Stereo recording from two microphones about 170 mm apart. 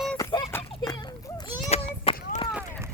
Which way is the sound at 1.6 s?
35° left (ahead or behind).